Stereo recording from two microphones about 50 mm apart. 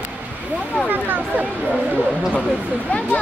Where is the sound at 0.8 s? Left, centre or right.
Right.